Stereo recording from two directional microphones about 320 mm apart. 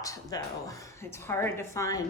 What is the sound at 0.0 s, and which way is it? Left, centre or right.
Speech, centre.